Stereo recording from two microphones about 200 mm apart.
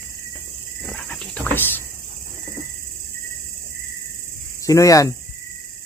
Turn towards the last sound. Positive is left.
turn(degrees=15)  # may be behind; listen again after turning